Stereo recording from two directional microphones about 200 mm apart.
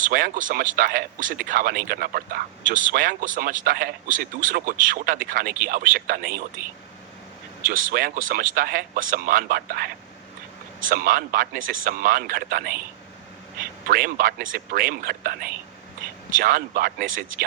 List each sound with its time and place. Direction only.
0.0 s speech: 45° right (ahead or behind)
7.6 s speech: 45° right (ahead or behind)